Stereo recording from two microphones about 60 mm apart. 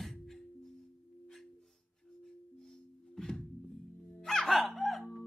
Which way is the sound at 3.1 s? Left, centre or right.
Centre.